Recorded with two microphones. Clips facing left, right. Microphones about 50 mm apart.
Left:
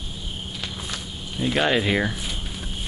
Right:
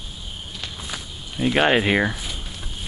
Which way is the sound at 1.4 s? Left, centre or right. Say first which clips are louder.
Right 3 dB; right.